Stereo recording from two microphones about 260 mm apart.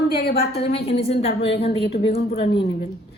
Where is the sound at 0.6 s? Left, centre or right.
Left.